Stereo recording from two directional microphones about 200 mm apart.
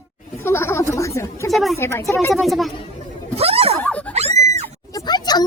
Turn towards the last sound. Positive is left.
turn(degrees=20)  # may be behind; listen again after turning